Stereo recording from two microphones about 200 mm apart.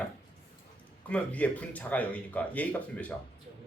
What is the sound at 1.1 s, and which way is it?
Speech, 5° left (ahead or behind).